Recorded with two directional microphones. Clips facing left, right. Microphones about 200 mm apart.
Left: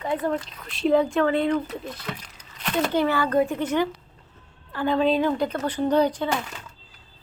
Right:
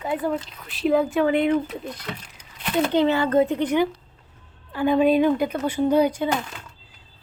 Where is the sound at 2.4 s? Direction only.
10° right (ahead or behind).